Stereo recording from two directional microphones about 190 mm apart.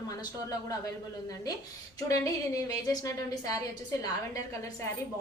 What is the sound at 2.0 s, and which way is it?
A woman's voice, 15° left (ahead or behind).